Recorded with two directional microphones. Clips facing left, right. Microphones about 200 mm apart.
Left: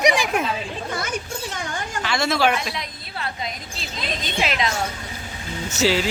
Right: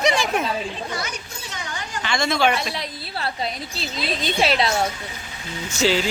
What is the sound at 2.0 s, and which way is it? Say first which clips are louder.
Speech: even; 5° left (ahead or behind).